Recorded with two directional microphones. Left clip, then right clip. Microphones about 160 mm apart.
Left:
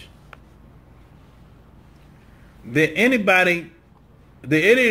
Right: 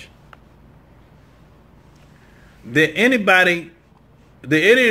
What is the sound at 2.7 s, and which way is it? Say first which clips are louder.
A man's voice: right 2 dB; 15° right (ahead or behind).